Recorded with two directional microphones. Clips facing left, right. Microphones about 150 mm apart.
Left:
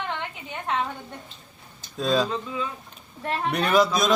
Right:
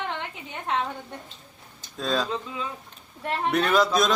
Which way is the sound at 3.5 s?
Centre (ahead or behind).